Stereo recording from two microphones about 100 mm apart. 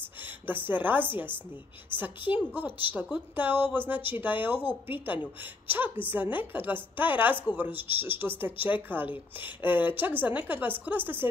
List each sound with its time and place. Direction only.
0.2 s a woman's voice: 20° right (ahead or behind)